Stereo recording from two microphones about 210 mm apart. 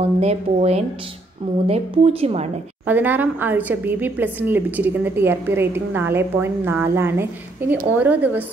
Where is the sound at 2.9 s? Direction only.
10° right (ahead or behind).